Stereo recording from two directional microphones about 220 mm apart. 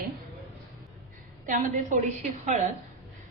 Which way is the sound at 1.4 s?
35° right (ahead or behind).